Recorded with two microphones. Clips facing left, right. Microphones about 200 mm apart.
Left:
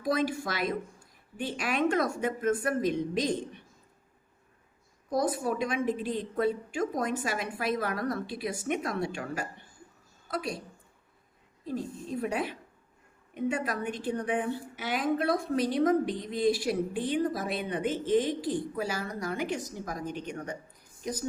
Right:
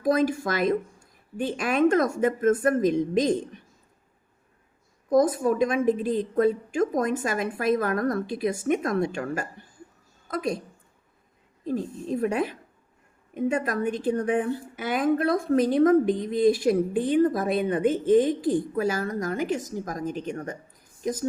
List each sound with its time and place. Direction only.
0.0 s a woman's voice: 45° right (ahead or behind)
5.0 s a woman's voice: 45° right (ahead or behind)
11.6 s a woman's voice: 45° right (ahead or behind)